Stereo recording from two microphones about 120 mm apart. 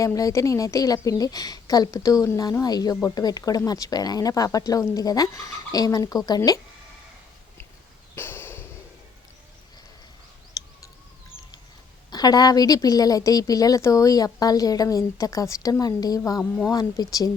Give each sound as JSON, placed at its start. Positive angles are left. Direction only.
{"t": 0.0, "sound": "a woman's voice", "side_deg": 30}
{"t": 8.1, "sound": "a sound", "side_deg": 20}
{"t": 12.1, "sound": "a woman's voice", "side_deg": 35}
{"t": 16.4, "sound": "speech", "side_deg": 5}
{"t": 16.7, "sound": "a woman's voice", "side_deg": 30}